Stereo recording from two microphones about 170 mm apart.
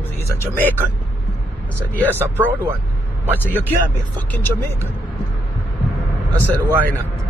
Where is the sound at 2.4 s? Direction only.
10° right (ahead or behind).